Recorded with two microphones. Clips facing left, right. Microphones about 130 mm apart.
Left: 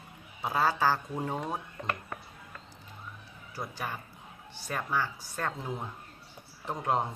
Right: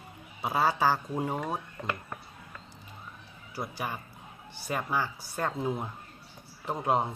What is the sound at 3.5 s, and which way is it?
A woman's voice, 10° right (ahead or behind).